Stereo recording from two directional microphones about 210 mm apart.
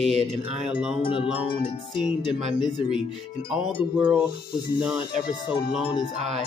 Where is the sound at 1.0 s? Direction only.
25° left (ahead or behind).